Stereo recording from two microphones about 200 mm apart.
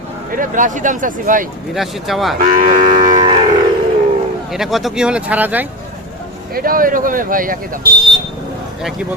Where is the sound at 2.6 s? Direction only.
40° right (ahead or behind).